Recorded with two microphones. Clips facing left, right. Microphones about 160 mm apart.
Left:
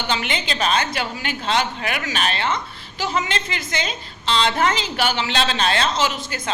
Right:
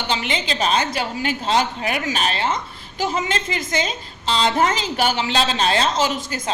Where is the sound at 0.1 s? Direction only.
35° right (ahead or behind).